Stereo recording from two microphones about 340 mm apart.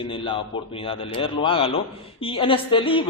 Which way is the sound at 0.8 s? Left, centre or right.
Centre.